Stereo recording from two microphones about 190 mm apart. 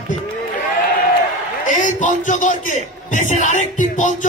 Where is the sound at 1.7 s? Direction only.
40° left (ahead or behind).